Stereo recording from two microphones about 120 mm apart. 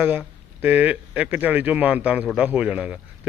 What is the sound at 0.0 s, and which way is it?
A man's voice, 15° right (ahead or behind).